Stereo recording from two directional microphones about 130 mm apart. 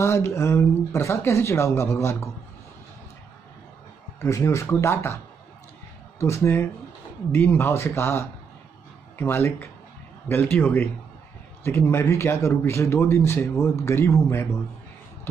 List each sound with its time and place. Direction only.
0.0 s speech: 20° left (ahead or behind)
4.2 s speech: 20° left (ahead or behind)